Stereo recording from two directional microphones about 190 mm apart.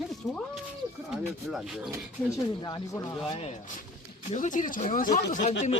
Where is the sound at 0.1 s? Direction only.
Centre (ahead or behind).